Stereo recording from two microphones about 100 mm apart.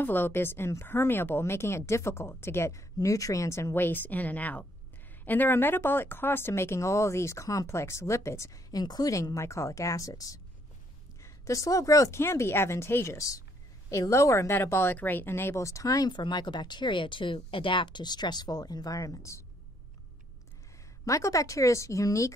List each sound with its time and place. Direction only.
0.0 s a woman's voice: 20° left (ahead or behind)
21.0 s a woman's voice: 30° left (ahead or behind)